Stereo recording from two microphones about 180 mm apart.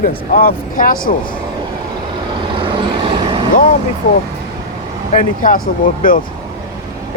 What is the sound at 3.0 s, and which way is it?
Vehicle, 30° right (ahead or behind).